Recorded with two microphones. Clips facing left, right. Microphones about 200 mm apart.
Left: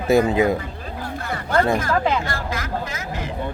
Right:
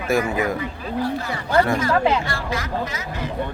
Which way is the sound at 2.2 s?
45° left (ahead or behind).